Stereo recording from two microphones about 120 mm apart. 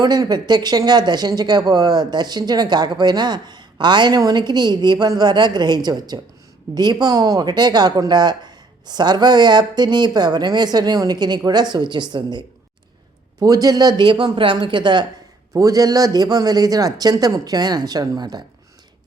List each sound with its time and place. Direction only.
0.0 s speech: 35° right (ahead or behind)
15.5 s speech: 30° right (ahead or behind)